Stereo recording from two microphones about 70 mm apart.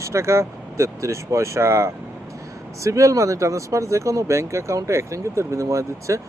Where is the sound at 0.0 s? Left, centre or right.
Right.